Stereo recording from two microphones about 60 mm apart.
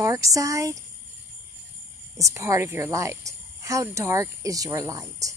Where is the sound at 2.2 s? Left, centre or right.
Right.